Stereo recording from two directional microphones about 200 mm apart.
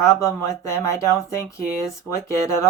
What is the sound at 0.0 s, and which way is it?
Speech, 15° left (ahead or behind).